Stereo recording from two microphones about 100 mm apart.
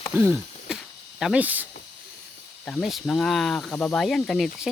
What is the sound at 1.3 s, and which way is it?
Speech, 15° right (ahead or behind).